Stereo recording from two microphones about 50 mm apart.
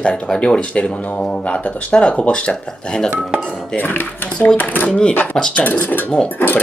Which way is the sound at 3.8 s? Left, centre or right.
Left.